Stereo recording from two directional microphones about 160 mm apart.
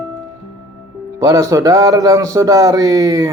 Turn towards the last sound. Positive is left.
turn(degrees=-20)  # may be behind; listen again after turning